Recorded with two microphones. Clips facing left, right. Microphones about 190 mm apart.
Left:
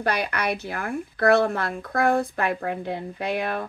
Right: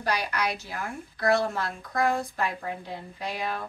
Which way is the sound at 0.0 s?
60° left (ahead or behind).